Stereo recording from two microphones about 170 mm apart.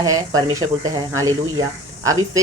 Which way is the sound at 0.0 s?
20° right (ahead or behind).